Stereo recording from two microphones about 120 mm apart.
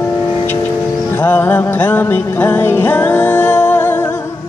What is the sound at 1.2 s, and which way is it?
Music, 15° left (ahead or behind).